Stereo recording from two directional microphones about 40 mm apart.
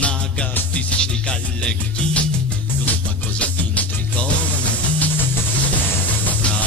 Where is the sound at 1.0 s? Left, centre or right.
Left.